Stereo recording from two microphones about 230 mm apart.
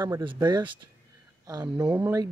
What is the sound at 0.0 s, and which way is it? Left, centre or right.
Speech, right.